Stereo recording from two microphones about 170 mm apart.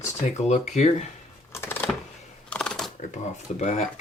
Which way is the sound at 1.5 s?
15° left (ahead or behind).